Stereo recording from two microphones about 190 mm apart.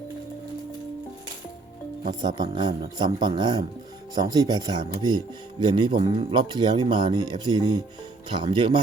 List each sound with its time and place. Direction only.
2.2 s speech: 25° right (ahead or behind)